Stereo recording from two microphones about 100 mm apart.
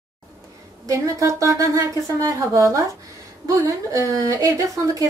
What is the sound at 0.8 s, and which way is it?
Speech, 35° right (ahead or behind).